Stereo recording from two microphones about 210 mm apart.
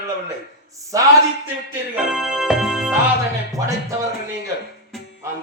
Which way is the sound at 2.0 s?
5° right (ahead or behind).